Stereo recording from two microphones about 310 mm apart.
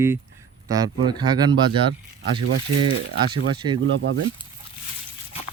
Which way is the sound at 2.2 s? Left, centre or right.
Right.